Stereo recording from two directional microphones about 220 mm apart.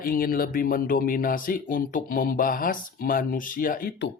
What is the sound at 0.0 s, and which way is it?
Speech, 40° left (ahead or behind).